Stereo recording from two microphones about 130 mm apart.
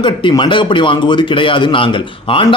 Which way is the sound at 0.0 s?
35° left (ahead or behind).